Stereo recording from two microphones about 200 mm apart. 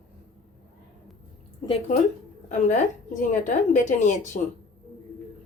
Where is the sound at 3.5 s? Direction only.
35° left (ahead or behind).